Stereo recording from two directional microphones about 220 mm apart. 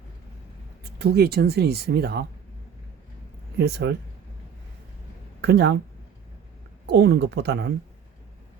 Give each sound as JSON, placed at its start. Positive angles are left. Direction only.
{"t": 0.9, "sound": "speech", "side_deg": -45}
{"t": 3.6, "sound": "speech", "side_deg": -50}
{"t": 5.4, "sound": "speech", "side_deg": -50}
{"t": 6.8, "sound": "speech", "side_deg": -50}